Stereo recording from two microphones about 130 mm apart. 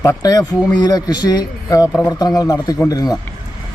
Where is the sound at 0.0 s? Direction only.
25° left (ahead or behind).